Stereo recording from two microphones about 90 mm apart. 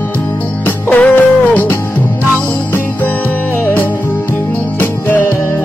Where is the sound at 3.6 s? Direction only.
20° left (ahead or behind).